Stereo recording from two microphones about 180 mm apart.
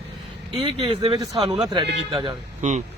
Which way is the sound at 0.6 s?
30° right (ahead or behind).